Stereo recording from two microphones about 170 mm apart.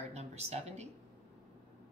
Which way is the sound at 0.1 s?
40° right (ahead or behind).